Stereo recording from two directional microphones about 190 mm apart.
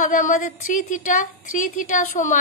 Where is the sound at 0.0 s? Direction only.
45° left (ahead or behind).